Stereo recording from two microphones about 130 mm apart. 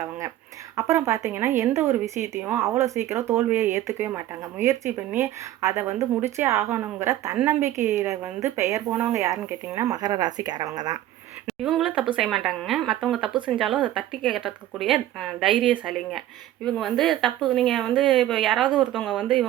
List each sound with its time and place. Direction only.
0.8 s speech: 20° right (ahead or behind)
11.4 s a woman's voice: centre (ahead or behind)